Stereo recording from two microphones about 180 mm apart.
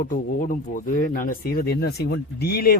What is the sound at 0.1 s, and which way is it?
Speech, 50° left (ahead or behind).